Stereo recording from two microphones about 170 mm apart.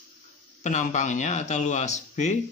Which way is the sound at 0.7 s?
45° left (ahead or behind).